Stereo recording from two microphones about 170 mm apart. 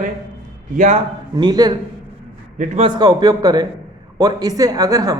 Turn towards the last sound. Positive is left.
turn(degrees=-20)  # may be behind; listen again after turning